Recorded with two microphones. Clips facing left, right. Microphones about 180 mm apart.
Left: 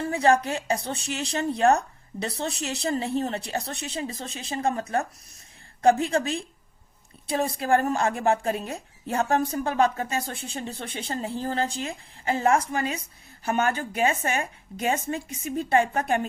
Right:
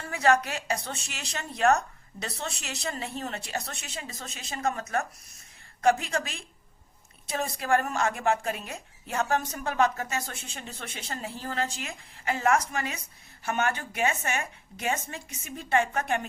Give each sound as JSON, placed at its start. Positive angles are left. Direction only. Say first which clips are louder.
{"t": 0.1, "sound": "a woman's voice", "louder": "left 2 dB", "side_deg": 30}